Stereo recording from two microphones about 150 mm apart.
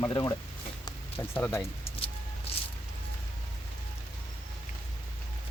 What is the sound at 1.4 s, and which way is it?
Speech, 15° left (ahead or behind).